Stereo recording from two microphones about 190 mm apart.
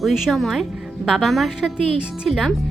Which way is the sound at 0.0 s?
Centre (ahead or behind).